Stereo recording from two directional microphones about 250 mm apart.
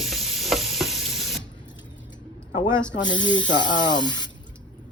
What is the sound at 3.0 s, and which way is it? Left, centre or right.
Speech, centre.